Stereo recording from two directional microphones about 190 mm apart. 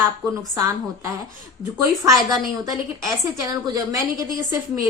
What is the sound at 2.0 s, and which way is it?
Speech, 15° right (ahead or behind).